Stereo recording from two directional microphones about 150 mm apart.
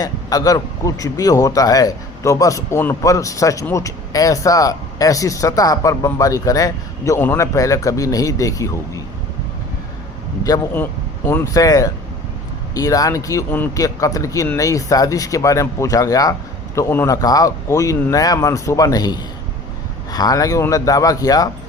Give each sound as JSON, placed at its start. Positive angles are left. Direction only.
{"t": 0.0, "sound": "speech", "side_deg": 25}
{"t": 10.4, "sound": "speech", "side_deg": 20}